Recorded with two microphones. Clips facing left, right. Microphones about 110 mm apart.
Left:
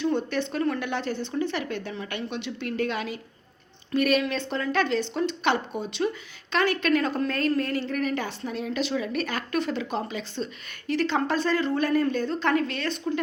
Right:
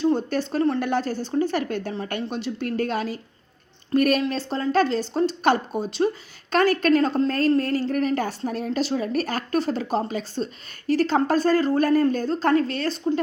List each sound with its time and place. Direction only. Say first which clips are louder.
0.0 s a woman's voice: right 4 dB; 35° right (ahead or behind)